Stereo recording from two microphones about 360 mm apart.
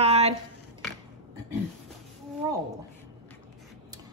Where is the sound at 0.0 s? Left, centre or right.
Centre.